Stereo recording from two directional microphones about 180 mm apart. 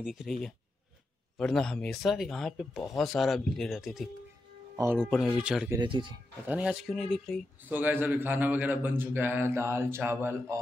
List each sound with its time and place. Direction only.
0.0 s speech: 5° right (ahead or behind)
1.4 s speech: 5° left (ahead or behind)
4.7 s a man's voice: 15° right (ahead or behind)
5.1 s speech: centre (ahead or behind)
5.7 s speech: 25° right (ahead or behind)
6.4 s speech: 5° right (ahead or behind)
7.6 s a man's voice: 10° right (ahead or behind)